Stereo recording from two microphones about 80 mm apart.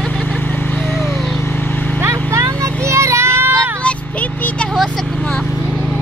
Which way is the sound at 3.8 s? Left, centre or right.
Centre.